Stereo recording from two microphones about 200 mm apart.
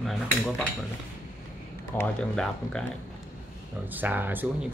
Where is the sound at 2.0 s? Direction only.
5° left (ahead or behind).